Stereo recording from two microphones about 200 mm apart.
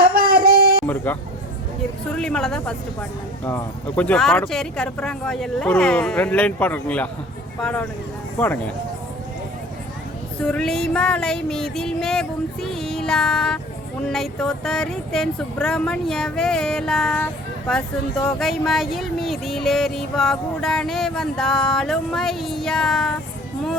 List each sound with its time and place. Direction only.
0.1 s a sound: 50° right (ahead or behind)
0.9 s vehicle: 10° left (ahead or behind)
2.1 s speech: 5° left (ahead or behind)
10.4 s speech: 5° left (ahead or behind)